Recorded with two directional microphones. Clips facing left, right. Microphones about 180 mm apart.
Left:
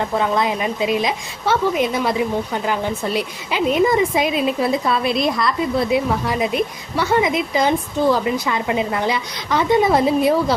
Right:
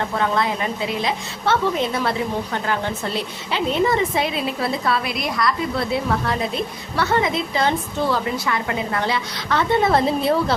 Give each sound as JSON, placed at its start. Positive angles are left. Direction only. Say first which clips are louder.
{"t": 0.2, "sound": "a woman's voice", "louder": "left 1 dB", "side_deg": 15}